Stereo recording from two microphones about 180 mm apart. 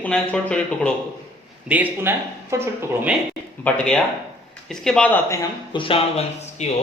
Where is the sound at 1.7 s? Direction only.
10° right (ahead or behind).